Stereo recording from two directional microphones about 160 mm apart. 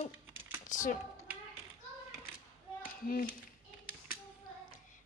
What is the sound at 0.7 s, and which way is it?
Speech, 50° left (ahead or behind).